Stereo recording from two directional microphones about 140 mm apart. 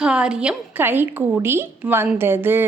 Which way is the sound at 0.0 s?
5° right (ahead or behind).